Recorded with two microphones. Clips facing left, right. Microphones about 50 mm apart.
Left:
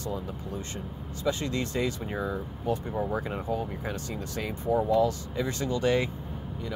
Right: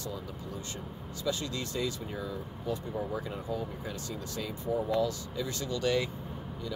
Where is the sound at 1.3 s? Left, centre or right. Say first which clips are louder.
Left 5 dB; left.